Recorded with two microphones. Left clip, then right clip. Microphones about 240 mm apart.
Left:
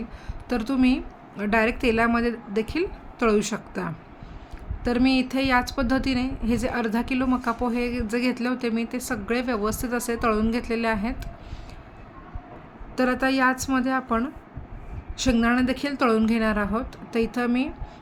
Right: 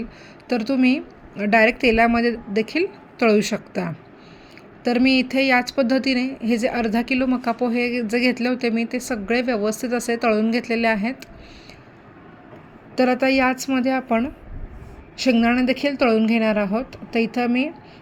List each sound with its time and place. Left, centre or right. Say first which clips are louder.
0.4 s a woman's voice: right 4 dB; centre
13.0 s a woman's voice: right 4 dB; centre
15.2 s a woman's voice: right 4 dB; centre